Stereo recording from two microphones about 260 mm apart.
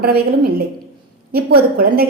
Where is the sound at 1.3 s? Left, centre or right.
Right.